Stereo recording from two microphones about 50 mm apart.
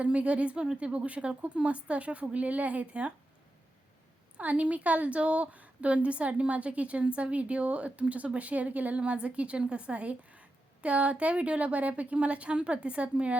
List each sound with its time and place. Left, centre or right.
0.0 s a woman's voice: right
4.4 s a woman's voice: right